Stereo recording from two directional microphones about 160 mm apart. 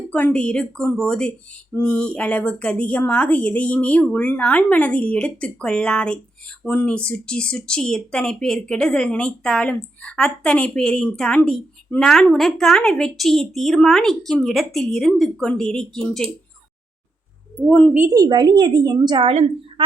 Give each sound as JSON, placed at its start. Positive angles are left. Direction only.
{"t": 0.1, "sound": "a woman's voice", "side_deg": 10}
{"t": 17.7, "sound": "a woman's voice", "side_deg": 10}
{"t": 17.9, "sound": "a woman's voice", "side_deg": -20}